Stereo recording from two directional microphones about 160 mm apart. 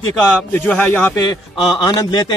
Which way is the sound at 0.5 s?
10° left (ahead or behind).